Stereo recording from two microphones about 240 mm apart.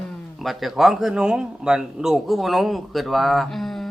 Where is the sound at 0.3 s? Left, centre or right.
Centre.